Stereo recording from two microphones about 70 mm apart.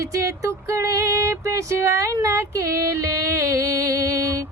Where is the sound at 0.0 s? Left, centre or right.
Right.